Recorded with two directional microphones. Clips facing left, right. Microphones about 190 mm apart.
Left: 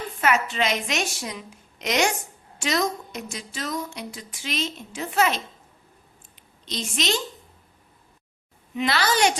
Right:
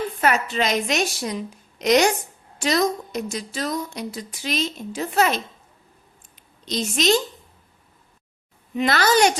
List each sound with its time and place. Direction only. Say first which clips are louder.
0.2 s a woman's voice: even; 40° right (ahead or behind)
6.7 s a child's voice: right 7 dB; 40° right (ahead or behind)
8.7 s a child's voice: right 4 dB; 45° right (ahead or behind)